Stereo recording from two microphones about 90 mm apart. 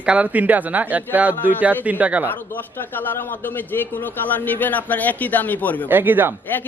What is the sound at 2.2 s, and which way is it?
A man's voice, 20° left (ahead or behind).